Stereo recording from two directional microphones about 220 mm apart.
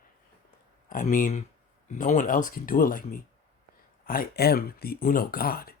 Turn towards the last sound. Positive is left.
turn(degrees=40)  # may be behind; listen again after turning